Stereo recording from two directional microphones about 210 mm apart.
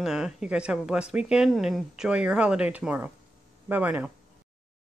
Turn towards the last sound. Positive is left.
turn(degrees=-5)  # may be behind; listen again after turning